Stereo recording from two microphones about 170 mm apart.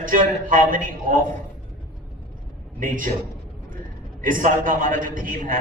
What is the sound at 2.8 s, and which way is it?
Speech, 55° right (ahead or behind).